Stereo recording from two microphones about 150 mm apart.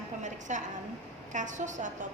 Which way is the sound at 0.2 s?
55° right (ahead or behind).